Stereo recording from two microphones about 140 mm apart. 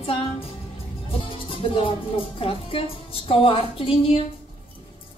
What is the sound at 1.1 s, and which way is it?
Music, 40° left (ahead or behind).